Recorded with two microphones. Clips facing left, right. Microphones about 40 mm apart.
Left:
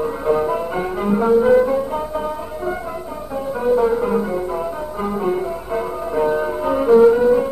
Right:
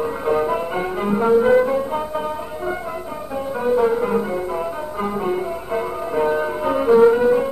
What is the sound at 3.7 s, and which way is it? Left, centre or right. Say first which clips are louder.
Music: left 1 dB; centre.